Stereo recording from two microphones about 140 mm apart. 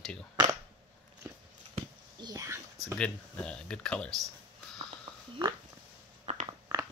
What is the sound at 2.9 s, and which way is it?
Speech, 5° left (ahead or behind).